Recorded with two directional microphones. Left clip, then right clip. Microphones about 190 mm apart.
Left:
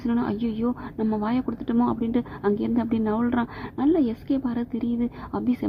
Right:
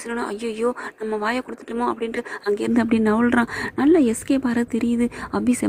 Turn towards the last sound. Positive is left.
turn(degrees=-25)  # may be behind; listen again after turning